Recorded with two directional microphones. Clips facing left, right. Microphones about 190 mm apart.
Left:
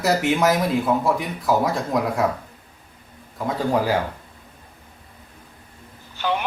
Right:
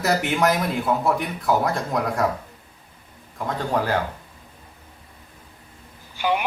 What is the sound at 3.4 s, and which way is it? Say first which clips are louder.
Speech: left 3 dB; 5° left (ahead or behind).